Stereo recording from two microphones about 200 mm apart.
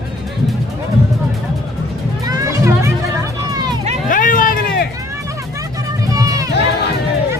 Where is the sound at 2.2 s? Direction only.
15° right (ahead or behind).